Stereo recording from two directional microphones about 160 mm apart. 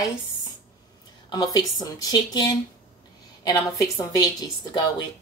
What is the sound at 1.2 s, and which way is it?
A woman's voice, 25° left (ahead or behind).